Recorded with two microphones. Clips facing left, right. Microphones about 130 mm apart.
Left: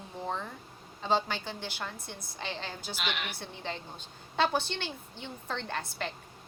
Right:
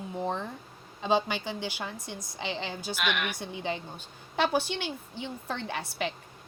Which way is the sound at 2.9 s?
60° right (ahead or behind).